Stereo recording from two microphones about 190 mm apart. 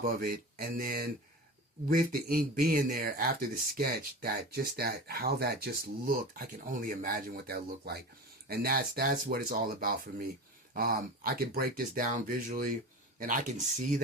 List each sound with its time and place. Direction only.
0.0 s speech: 50° right (ahead or behind)